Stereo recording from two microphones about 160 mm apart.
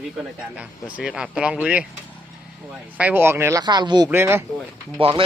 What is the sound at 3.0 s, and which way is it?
Speech, 10° right (ahead or behind).